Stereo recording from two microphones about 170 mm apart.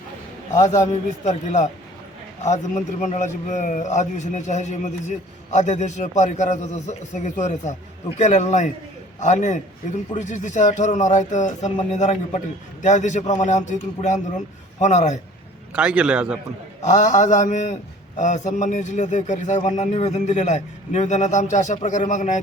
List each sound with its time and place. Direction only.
0.5 s a man's voice: 20° left (ahead or behind)
1.2 s a man's voice: 40° left (ahead or behind)
15.7 s a man's voice: 5° right (ahead or behind)
16.8 s a man's voice: 45° left (ahead or behind)